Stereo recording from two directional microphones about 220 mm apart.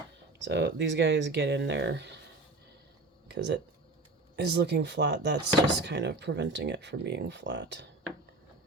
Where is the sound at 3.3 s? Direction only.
50° right (ahead or behind).